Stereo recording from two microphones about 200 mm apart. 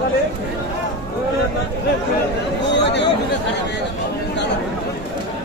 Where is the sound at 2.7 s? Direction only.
60° left (ahead or behind).